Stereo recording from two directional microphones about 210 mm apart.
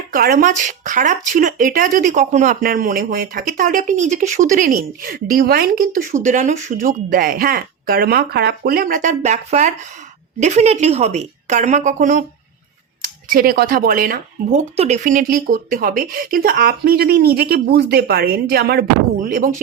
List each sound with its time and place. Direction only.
0.1 s speech: 45° right (ahead or behind)
13.3 s speech: 45° right (ahead or behind)